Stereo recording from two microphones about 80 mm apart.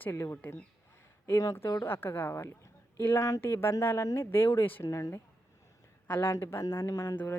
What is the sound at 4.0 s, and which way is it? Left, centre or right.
Speech, left.